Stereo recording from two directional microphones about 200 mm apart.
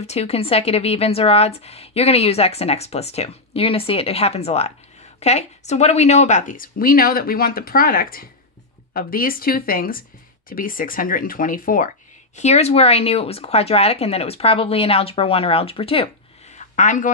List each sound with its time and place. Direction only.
0.0 s speech: 30° left (ahead or behind)
12.4 s speech: 35° left (ahead or behind)